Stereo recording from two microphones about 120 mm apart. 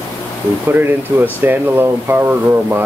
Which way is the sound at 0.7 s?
15° right (ahead or behind).